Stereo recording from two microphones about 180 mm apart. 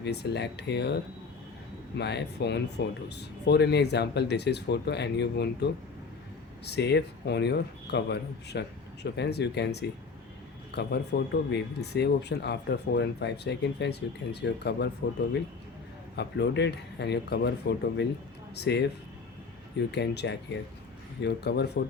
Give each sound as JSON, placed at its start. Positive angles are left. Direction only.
{"t": 0.0, "sound": "speech", "side_deg": 65}
{"t": 2.0, "sound": "speech", "side_deg": 70}
{"t": 6.7, "sound": "speech", "side_deg": 70}
{"t": 16.1, "sound": "speech", "side_deg": 70}
{"t": 19.9, "sound": "speech", "side_deg": 70}